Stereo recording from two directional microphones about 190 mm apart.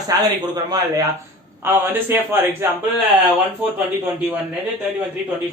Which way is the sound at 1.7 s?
15° right (ahead or behind).